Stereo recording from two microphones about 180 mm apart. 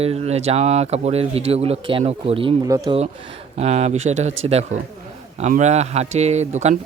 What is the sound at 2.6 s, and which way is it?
Speech, 20° right (ahead or behind).